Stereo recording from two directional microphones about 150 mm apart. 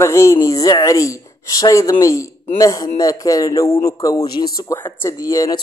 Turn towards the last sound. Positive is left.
turn(degrees=20)  # may be behind; listen again after turning